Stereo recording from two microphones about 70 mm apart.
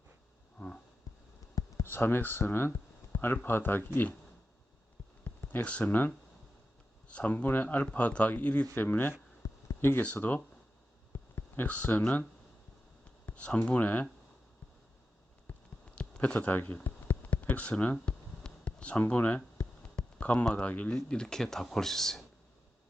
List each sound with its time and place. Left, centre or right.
1.8 s speech: left
5.2 s speech: left
7.1 s speech: centre
9.4 s a sound: left
10.0 s speech: left
13.2 s speech: centre
15.5 s a sound: centre
16.0 s speech: centre
16.8 s a sound: left
20.0 s speech: centre